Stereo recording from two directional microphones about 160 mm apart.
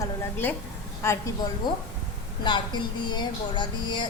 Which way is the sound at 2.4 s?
30° left (ahead or behind).